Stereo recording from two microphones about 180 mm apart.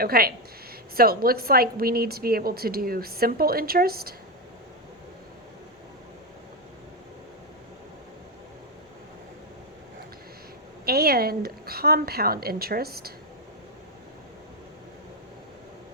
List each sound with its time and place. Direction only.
0.0 s a woman's voice: 55° right (ahead or behind)
10.8 s a woman's voice: 60° right (ahead or behind)